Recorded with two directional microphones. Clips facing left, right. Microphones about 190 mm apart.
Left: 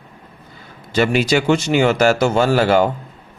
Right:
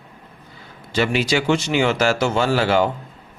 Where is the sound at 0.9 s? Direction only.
45° left (ahead or behind).